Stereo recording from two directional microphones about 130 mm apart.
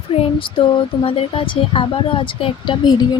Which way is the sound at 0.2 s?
40° left (ahead or behind).